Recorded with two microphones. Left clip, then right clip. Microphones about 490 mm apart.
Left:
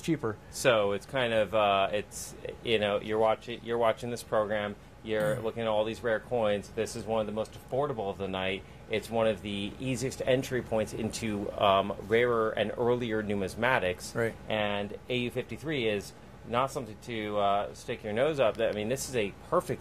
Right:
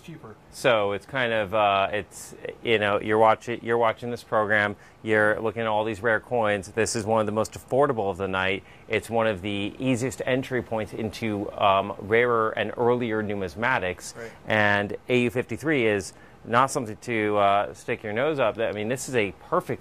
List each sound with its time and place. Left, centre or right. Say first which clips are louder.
0.6 s speech: right 4 dB; right
14.2 s speech: left 8 dB; left
14.5 s speech: right 9 dB; right